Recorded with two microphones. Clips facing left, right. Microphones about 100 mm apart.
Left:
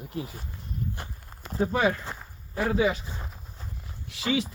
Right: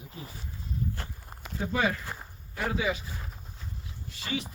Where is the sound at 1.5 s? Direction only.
35° left (ahead or behind).